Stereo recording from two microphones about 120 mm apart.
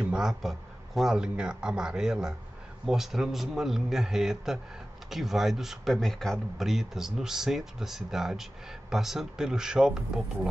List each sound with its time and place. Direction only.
0.0 s speech: 5° right (ahead or behind)